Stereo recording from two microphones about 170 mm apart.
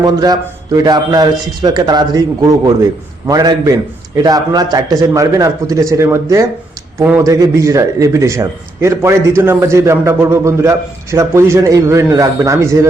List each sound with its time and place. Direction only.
0.0 s a man's voice: 25° right (ahead or behind)